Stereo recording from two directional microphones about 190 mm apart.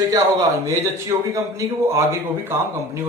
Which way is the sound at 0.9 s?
15° right (ahead or behind).